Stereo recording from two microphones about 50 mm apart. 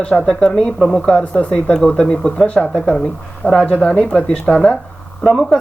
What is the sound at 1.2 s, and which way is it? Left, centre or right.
Speech, left.